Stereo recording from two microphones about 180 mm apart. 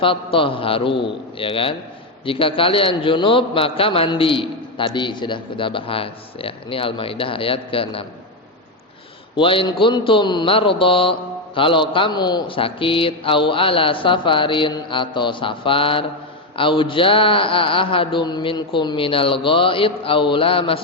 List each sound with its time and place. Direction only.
0.0 s a man's voice: 30° left (ahead or behind)
9.3 s a man's voice: 30° left (ahead or behind)